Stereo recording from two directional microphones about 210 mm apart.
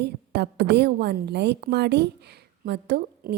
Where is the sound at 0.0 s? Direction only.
50° right (ahead or behind).